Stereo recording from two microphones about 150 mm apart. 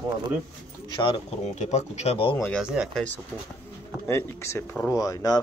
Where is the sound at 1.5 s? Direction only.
50° left (ahead or behind).